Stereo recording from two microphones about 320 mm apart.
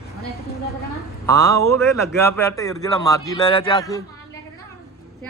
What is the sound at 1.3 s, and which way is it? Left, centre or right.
Speech, centre.